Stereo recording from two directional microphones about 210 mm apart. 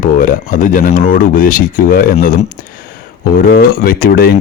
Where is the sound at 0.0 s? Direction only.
40° left (ahead or behind).